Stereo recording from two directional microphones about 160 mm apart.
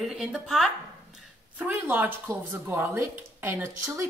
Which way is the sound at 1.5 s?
10° right (ahead or behind).